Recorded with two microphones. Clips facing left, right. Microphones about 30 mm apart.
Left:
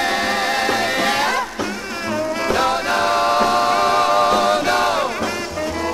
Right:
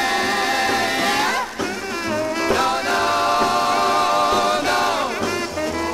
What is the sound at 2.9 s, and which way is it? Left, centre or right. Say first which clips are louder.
A capella: left 2 dB; centre.